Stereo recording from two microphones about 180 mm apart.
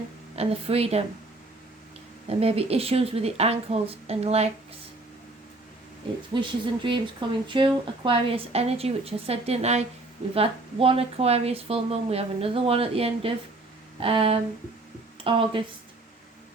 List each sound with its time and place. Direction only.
0.3 s speech: 35° right (ahead or behind)
2.2 s speech: 35° right (ahead or behind)
6.3 s speech: 25° right (ahead or behind)